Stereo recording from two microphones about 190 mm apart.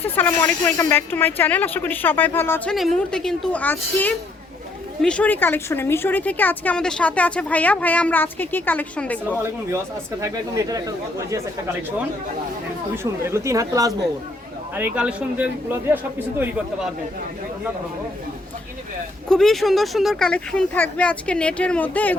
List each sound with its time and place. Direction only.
0.0 s speech: 10° left (ahead or behind)
10.2 s a man's voice: 15° right (ahead or behind)
13.0 s a man's voice: 15° right (ahead or behind)
19.3 s speech: centre (ahead or behind)